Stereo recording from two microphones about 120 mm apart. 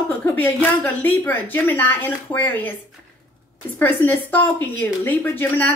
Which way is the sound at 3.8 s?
15° left (ahead or behind).